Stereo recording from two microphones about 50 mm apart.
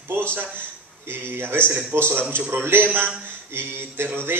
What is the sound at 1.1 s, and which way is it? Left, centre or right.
Speech, right.